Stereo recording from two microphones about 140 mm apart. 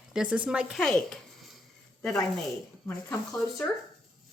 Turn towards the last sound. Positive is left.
turn(degrees=20)  # may be behind; listen again after turning